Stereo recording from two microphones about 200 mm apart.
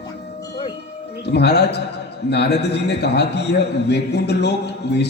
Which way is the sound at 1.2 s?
55° left (ahead or behind).